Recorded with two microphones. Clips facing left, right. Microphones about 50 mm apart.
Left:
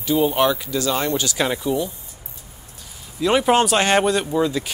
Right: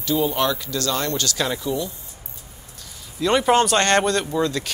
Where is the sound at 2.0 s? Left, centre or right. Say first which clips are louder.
Even; centre.